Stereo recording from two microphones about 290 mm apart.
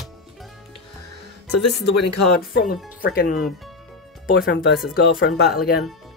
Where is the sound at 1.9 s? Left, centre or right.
Left.